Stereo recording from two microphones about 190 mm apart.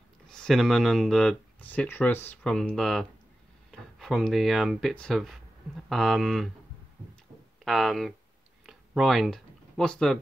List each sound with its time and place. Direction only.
0.3 s speech: 5° left (ahead or behind)
7.6 s speech: centre (ahead or behind)
8.6 s a sound: centre (ahead or behind)